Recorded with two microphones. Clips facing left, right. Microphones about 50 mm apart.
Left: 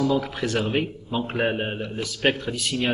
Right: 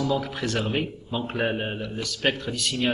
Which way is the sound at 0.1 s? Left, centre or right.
Centre.